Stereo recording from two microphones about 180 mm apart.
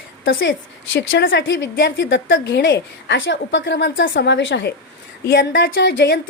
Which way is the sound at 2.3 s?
80° left.